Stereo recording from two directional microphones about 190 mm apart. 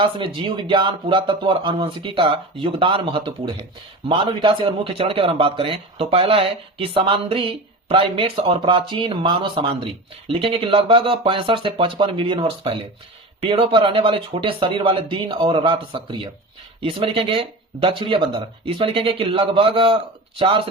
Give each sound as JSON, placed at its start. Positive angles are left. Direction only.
{"t": 0.0, "sound": "a man's voice", "side_deg": -25}